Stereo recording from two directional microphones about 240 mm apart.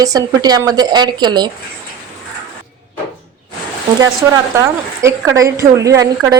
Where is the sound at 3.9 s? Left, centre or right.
Centre.